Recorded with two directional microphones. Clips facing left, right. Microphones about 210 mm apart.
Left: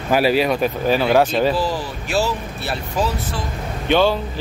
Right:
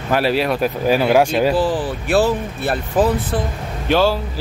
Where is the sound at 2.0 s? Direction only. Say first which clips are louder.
Right 5 dB; 55° right (ahead or behind).